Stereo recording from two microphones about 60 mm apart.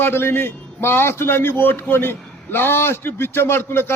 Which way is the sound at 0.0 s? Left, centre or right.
Left.